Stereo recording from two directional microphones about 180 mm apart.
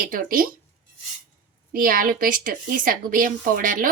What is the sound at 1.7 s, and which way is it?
Speech, 50° right (ahead or behind).